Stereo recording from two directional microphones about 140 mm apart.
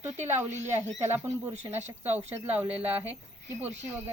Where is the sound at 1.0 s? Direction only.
20° right (ahead or behind).